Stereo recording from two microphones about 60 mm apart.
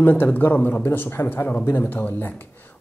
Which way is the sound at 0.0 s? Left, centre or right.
Left.